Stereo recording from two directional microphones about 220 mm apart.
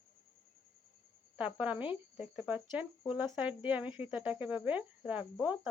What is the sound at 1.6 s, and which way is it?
A woman's voice, 5° right (ahead or behind).